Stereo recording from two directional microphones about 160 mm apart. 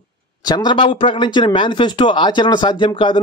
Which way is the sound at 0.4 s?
25° left (ahead or behind).